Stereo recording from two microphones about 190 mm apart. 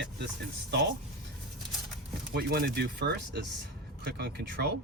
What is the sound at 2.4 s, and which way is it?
Speech, 55° right (ahead or behind).